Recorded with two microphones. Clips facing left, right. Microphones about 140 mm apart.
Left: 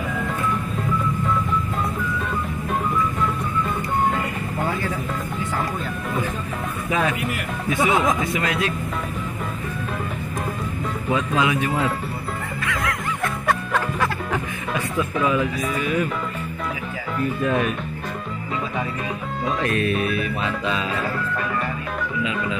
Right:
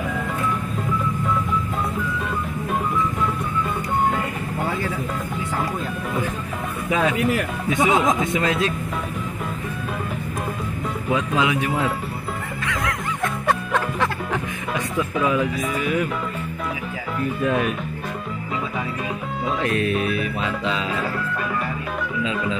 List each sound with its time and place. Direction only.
7.7 s speech: 15° right (ahead or behind)
11.1 s speech: 15° right (ahead or behind)
12.8 s music: 20° right (ahead or behind)
13.7 s music: 5° left (ahead or behind)
15.0 s speech: 10° right (ahead or behind)
17.5 s speech: 10° right (ahead or behind)
19.6 s speech: 20° right (ahead or behind)